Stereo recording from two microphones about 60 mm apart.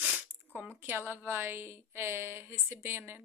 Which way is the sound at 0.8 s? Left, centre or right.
Right.